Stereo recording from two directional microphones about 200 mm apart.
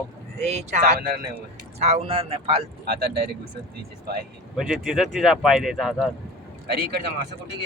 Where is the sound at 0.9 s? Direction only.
50° right (ahead or behind).